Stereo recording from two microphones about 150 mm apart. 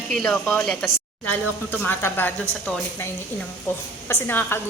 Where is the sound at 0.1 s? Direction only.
5° left (ahead or behind).